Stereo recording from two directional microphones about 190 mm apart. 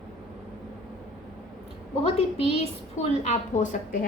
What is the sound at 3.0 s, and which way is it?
Speech, 40° left (ahead or behind).